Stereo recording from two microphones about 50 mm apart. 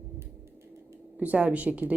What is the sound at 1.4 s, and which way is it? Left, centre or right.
Speech, right.